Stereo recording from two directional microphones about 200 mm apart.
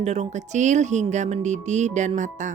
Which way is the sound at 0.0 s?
35° right (ahead or behind).